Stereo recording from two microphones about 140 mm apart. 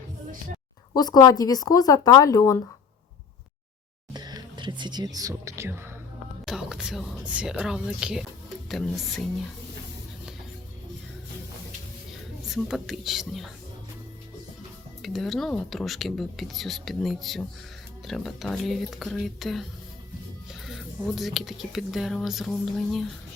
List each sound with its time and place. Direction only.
0.9 s speech: 30° left (ahead or behind)
4.1 s music: 30° right (ahead or behind)
6.4 s speech: 5° right (ahead or behind)
12.5 s speech: centre (ahead or behind)
15.0 s speech: centre (ahead or behind)
20.7 s speech: centre (ahead or behind)